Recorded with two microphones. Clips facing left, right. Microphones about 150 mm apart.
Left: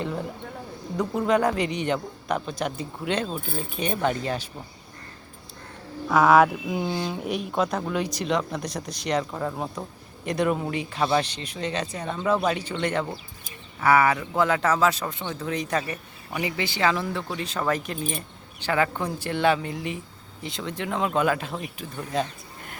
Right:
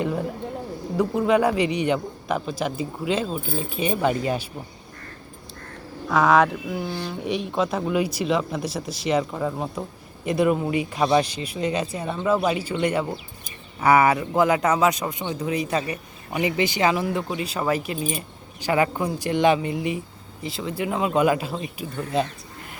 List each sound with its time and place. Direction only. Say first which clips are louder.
0.0 s a sound: right 4 dB; 5° right (ahead or behind)
0.9 s a man's voice: right 3 dB; 5° right (ahead or behind)
6.1 s a man's voice: left 1 dB; centre (ahead or behind)
6.7 s speech: left 1 dB; 15° left (ahead or behind)
7.3 s a man's voice: right 3 dB; centre (ahead or behind); by 22.0 s 15° right (ahead or behind)